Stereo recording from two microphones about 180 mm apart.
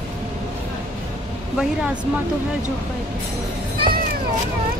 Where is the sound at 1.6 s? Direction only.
5° right (ahead or behind).